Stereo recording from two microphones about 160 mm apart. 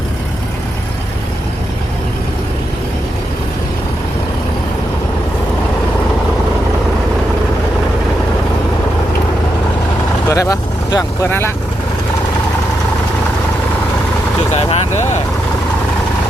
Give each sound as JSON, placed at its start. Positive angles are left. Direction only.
{"t": 10.2, "sound": "speech", "side_deg": 20}
{"t": 14.5, "sound": "vehicle", "side_deg": 45}